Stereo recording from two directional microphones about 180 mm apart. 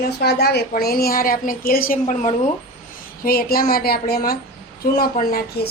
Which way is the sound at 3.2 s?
55° left (ahead or behind).